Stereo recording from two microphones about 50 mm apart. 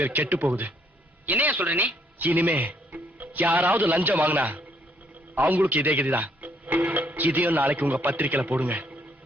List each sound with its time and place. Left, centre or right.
0.1 s a man's voice: right